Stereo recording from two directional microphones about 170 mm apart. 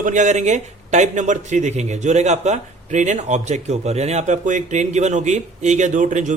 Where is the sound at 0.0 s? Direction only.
45° right (ahead or behind).